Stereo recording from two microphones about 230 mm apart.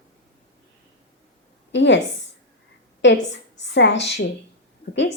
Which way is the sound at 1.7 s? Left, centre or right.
Left.